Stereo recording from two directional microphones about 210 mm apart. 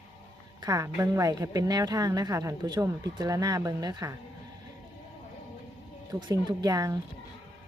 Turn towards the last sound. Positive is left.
turn(degrees=-15)  # may be behind; listen again after turning